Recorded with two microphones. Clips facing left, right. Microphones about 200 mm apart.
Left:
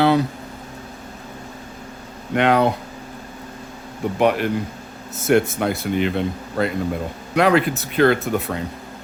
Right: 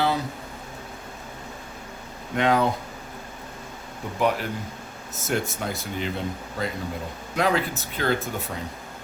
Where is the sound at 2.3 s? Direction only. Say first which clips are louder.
Left 5 dB; 70° left (ahead or behind).